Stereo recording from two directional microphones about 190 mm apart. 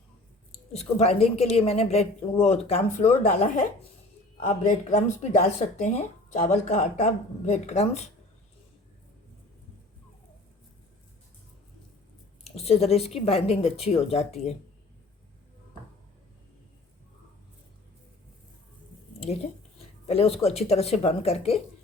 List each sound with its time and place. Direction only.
0.7 s a woman's voice: 35° left (ahead or behind)
12.5 s a woman's voice: 35° left (ahead or behind)
20.1 s a woman's voice: 30° left (ahead or behind)